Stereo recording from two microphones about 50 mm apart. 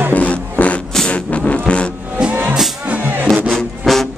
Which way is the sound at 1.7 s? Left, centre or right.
Left.